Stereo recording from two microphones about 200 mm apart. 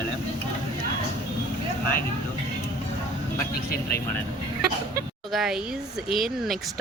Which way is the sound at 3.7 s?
50° left (ahead or behind).